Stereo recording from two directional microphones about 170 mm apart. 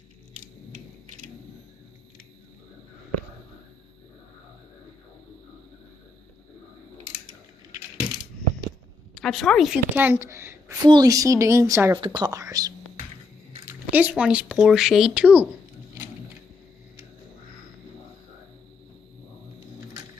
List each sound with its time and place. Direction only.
0.3 s a sound: 45° right (ahead or behind)
7.9 s coin: 25° right (ahead or behind)
9.2 s a woman's voice: centre (ahead or behind); by 11.9 s 15° right (ahead or behind)
11.9 s speech: 25° right (ahead or behind)
13.7 s speech: 10° right (ahead or behind)